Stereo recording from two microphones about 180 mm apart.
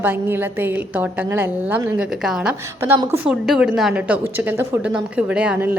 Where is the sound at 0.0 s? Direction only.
10° right (ahead or behind).